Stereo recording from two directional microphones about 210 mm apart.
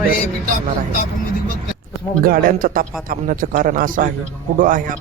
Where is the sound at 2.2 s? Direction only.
45° right (ahead or behind).